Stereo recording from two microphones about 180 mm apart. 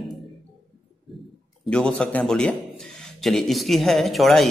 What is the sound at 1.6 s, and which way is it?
Speech, 5° left (ahead or behind).